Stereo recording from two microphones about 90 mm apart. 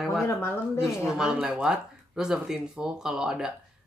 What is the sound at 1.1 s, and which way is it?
Speech, 10° right (ahead or behind).